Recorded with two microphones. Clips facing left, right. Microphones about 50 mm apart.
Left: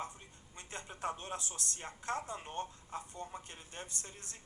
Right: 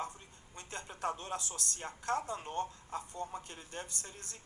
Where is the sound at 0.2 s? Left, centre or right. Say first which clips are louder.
Right 2 dB; left.